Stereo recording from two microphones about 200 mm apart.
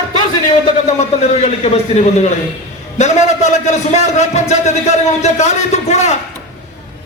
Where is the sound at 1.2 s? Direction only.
30° left (ahead or behind).